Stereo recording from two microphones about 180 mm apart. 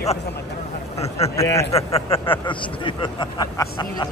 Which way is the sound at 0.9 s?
35° left (ahead or behind).